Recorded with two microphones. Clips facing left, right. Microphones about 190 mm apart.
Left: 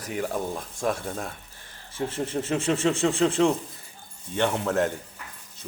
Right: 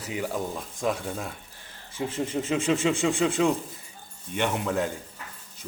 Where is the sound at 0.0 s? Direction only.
10° right (ahead or behind).